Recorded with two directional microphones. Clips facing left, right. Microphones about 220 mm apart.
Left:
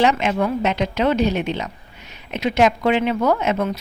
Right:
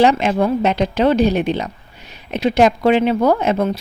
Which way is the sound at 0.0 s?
35° right (ahead or behind).